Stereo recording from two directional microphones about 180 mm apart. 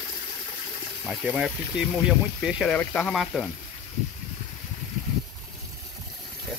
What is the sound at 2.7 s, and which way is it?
Speech, 10° left (ahead or behind).